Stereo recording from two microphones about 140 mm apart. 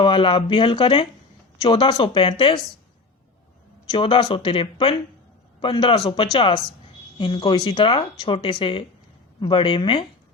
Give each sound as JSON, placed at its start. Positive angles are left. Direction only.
{"t": 0.0, "sound": "speech", "side_deg": 40}
{"t": 3.9, "sound": "speech", "side_deg": 35}
{"t": 5.6, "sound": "speech", "side_deg": 35}